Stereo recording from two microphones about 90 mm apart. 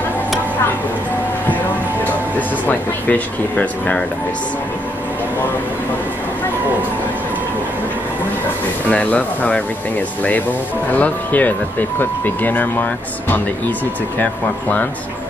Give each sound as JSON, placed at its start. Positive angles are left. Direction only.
{"t": 2.3, "sound": "speech", "side_deg": 20}
{"t": 8.8, "sound": "speech", "side_deg": 15}
{"t": 10.9, "sound": "speech", "side_deg": 20}
{"t": 14.1, "sound": "speech", "side_deg": 15}